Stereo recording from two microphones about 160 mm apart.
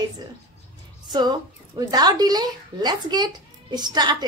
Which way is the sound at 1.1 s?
25° right (ahead or behind).